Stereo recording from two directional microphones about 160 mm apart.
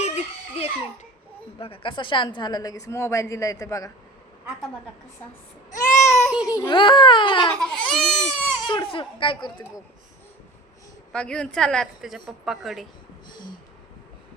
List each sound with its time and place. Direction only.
0.0 s baby cry: 40° left (ahead or behind)
1.5 s a woman's voice: 35° left (ahead or behind)
5.7 s baby cry: 15° left (ahead or behind)
6.3 s a woman's voice: 5° right (ahead or behind)
6.6 s speech: 30° left (ahead or behind)
7.6 s a woman's voice: 5° left (ahead or behind)
8.6 s speech: 30° left (ahead or behind)
11.1 s a woman's voice: 5° left (ahead or behind)